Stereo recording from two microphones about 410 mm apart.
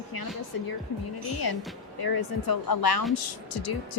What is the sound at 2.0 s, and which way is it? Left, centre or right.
Speech, left.